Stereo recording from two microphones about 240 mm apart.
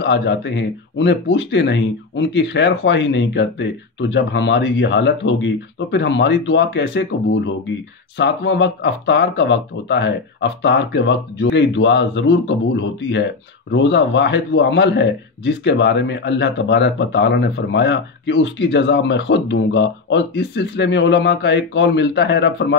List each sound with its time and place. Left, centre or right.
0.0 s speech: left